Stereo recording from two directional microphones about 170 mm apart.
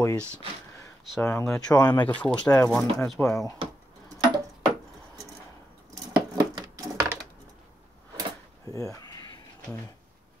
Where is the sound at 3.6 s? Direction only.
35° right (ahead or behind).